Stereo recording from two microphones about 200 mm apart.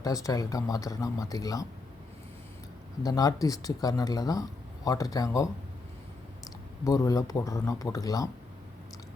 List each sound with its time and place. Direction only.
0.0 s speech: 15° left (ahead or behind)
3.0 s speech: 20° left (ahead or behind)
6.8 s speech: 15° left (ahead or behind)